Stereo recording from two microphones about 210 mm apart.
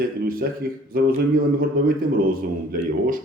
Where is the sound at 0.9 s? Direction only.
45° right (ahead or behind).